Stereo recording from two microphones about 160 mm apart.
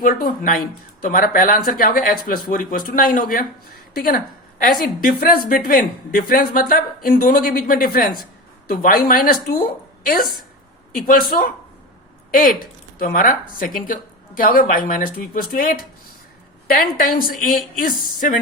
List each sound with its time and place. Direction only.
0.0 s a woman's voice: 65° left (ahead or behind)